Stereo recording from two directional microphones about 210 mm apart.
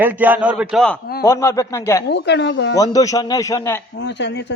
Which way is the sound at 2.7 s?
15° left (ahead or behind).